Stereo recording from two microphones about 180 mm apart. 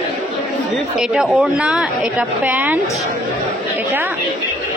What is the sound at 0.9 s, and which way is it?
A woman's voice, centre (ahead or behind).